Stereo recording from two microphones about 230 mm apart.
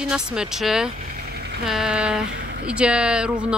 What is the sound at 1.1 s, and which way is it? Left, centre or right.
Vehicle, right.